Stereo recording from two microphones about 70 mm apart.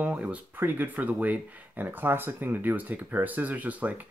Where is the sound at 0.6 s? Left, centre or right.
Right.